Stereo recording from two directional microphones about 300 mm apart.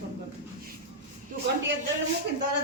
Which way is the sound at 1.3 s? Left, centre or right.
Right.